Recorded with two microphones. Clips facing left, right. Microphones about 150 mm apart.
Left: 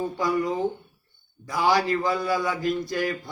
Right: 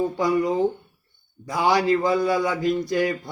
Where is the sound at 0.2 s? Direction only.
25° right (ahead or behind).